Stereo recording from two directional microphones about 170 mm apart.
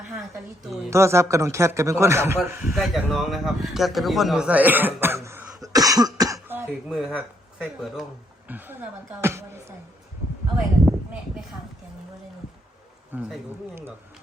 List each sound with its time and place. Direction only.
0.9 s a man's voice: 15° right (ahead or behind)
2.7 s speech: centre (ahead or behind)
5.6 s cough: 20° right (ahead or behind)
6.8 s a man's voice: centre (ahead or behind)
13.1 s a man's voice: 5° right (ahead or behind)